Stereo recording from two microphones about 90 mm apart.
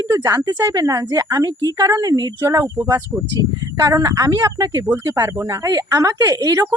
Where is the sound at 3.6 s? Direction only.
45° right (ahead or behind).